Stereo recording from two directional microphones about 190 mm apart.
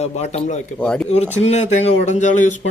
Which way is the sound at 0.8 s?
5° left (ahead or behind).